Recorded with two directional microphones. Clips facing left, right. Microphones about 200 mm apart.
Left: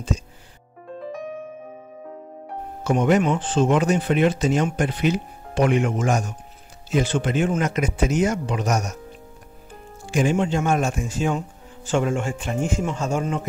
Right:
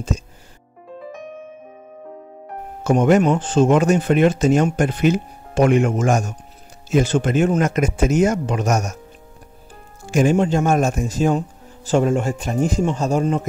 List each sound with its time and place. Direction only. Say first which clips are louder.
2.8 s speech: right 4 dB; 45° right (ahead or behind)
10.0 s speech: right 4 dB; 45° right (ahead or behind)